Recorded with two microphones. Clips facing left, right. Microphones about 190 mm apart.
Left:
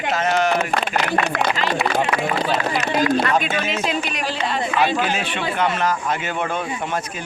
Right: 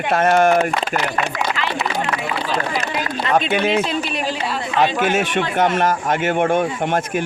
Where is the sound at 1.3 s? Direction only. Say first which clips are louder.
Left 2 dB; 60° left (ahead or behind).